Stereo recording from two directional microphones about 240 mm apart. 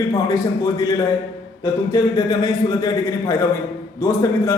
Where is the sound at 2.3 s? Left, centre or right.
Centre.